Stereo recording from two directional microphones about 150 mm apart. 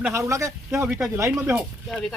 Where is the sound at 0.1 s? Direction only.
20° right (ahead or behind).